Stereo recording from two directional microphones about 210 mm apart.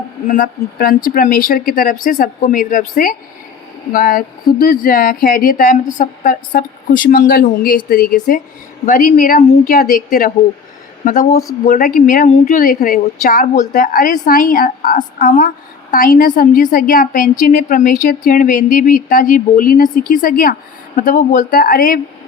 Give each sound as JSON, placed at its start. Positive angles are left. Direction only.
{"t": 0.3, "sound": "a woman's voice", "side_deg": 40}